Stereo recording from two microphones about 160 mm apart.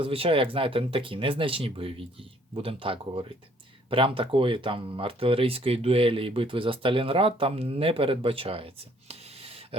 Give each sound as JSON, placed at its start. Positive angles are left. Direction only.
{"t": 0.0, "sound": "speech", "side_deg": -35}